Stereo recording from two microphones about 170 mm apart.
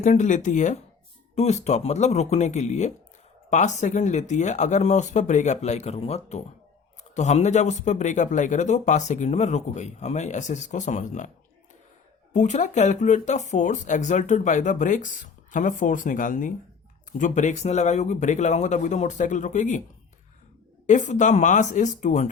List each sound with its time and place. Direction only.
0.0 s speech: 45° left (ahead or behind)
12.3 s speech: 45° left (ahead or behind)
20.8 s speech: 45° left (ahead or behind)